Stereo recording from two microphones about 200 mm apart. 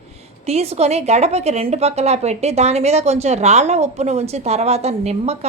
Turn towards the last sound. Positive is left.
turn(degrees=-30)  # may be behind; listen again after turning